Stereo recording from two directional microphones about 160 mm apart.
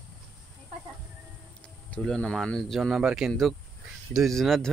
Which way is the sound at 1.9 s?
5° left (ahead or behind).